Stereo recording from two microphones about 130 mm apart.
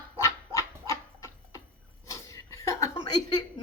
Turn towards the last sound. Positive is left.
turn(degrees=30)  # may be behind; listen again after turning